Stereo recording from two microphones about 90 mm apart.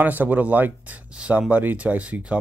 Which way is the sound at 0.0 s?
20° right (ahead or behind).